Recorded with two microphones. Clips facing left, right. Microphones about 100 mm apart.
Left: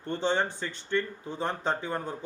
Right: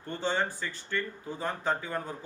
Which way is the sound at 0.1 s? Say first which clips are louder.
Left 3 dB; 20° left (ahead or behind).